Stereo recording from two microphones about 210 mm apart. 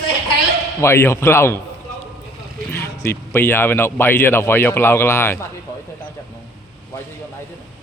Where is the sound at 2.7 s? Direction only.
10° left (ahead or behind).